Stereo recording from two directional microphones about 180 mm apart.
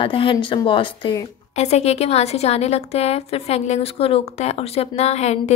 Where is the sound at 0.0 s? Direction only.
30° left (ahead or behind).